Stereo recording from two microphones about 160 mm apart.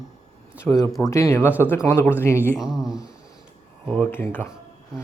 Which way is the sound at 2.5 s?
5° right (ahead or behind).